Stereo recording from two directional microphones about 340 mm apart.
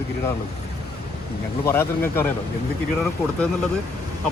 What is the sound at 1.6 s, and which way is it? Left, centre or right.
Speech, centre.